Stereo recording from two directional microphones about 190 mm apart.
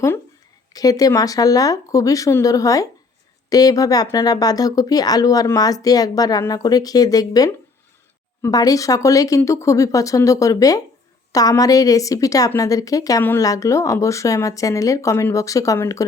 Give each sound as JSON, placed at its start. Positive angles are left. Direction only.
{"t": 0.7, "sound": "a woman's voice", "side_deg": 20}